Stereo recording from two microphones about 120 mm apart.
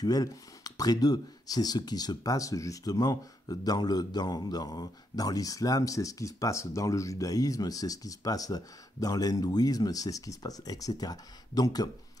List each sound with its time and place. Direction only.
0.0 s speech: 30° left (ahead or behind)